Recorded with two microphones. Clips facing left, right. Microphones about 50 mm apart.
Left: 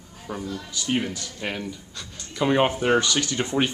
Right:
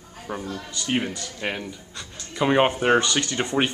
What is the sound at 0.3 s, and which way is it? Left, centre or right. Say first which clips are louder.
Speech: right 1 dB; right.